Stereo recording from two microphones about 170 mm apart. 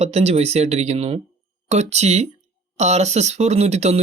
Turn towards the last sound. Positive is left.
turn(degrees=-40)  # may be behind; listen again after turning